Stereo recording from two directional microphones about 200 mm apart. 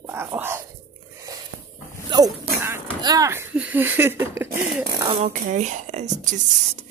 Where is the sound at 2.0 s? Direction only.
20° right (ahead or behind).